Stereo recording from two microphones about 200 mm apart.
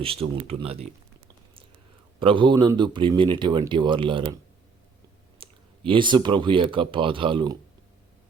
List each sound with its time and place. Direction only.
0.0 s speech: 30° right (ahead or behind)
2.1 s speech: 25° right (ahead or behind)
5.4 s speech: 25° right (ahead or behind)